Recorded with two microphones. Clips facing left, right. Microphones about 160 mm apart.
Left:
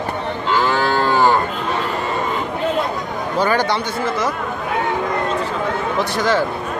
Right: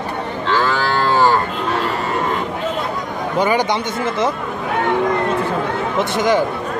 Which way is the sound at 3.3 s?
15° right (ahead or behind).